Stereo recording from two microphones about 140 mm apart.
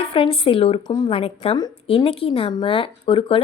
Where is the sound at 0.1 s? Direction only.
40° left (ahead or behind).